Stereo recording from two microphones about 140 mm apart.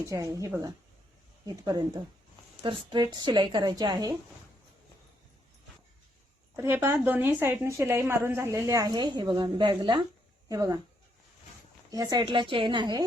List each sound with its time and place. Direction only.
0.0 s a woman's voice: 25° right (ahead or behind)
6.6 s a woman's voice: 20° right (ahead or behind)
11.9 s a woman's voice: 25° right (ahead or behind)